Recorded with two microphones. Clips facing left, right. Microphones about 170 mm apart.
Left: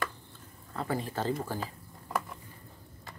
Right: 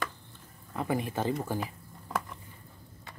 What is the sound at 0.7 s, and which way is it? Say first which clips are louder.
Speech: right 2 dB; 15° right (ahead or behind).